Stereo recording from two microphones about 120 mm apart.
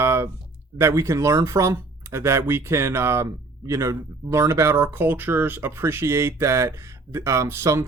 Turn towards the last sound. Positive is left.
turn(degrees=-25)  # may be behind; listen again after turning